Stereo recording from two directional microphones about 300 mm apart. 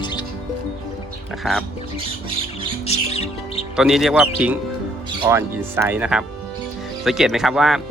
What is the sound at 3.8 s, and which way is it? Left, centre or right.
Speech, centre.